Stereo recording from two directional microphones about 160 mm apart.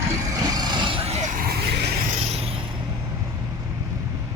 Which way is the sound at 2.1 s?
40° right (ahead or behind).